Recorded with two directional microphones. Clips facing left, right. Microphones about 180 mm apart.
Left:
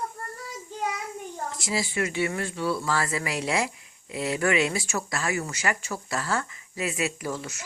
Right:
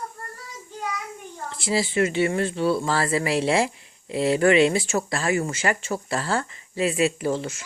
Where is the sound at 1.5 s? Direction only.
30° right (ahead or behind).